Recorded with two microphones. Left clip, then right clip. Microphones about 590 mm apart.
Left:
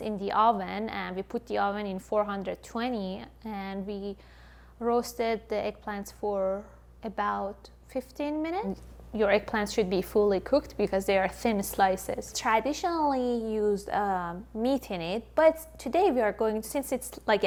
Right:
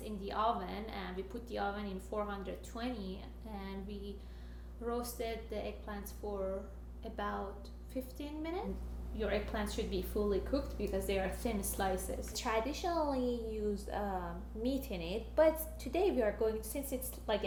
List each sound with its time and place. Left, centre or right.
0.0 s a woman's voice: left
9.1 s a woman's voice: left
12.3 s a woman's voice: left